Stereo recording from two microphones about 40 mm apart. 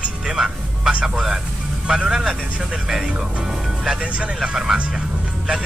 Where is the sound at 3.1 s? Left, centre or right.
Right.